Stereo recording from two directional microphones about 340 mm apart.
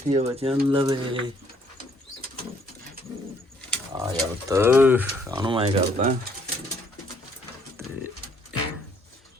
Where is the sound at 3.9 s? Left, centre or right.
Centre.